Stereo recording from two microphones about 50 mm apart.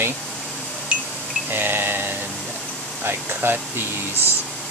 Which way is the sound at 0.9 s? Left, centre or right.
Right.